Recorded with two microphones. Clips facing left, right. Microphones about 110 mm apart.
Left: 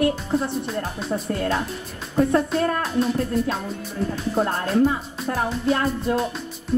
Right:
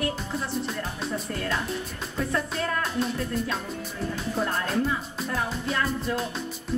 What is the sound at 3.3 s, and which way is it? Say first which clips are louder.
Music: left 7 dB; centre (ahead or behind).